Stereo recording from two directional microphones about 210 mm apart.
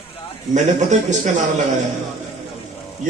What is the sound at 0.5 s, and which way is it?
A man's voice, 35° right (ahead or behind).